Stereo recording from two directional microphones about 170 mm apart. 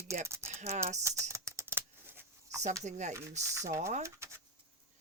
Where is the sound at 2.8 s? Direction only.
45° right (ahead or behind).